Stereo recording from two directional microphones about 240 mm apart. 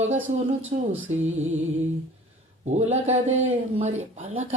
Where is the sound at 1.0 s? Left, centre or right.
Right.